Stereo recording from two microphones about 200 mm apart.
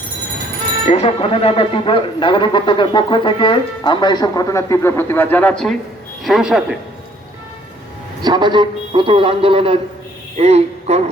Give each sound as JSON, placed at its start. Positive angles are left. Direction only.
{"t": 0.9, "sound": "speech", "side_deg": 35}
{"t": 8.2, "sound": "a man's voice", "side_deg": -20}